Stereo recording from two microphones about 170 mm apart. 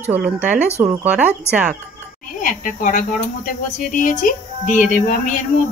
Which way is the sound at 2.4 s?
50° left (ahead or behind).